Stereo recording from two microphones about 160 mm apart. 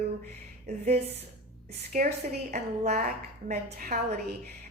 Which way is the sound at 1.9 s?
55° right (ahead or behind).